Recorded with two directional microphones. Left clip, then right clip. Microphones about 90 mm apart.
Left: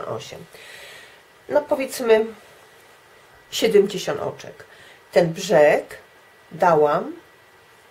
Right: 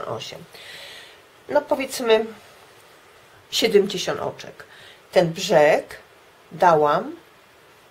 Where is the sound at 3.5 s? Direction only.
20° right (ahead or behind).